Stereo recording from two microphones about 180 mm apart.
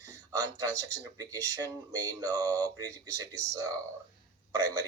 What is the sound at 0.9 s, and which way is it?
Speech, 20° right (ahead or behind).